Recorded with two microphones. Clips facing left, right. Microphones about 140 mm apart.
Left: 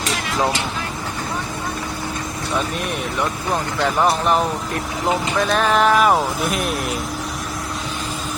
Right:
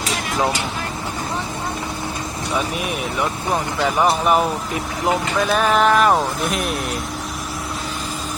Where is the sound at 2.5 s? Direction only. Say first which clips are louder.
Even; 5° right (ahead or behind).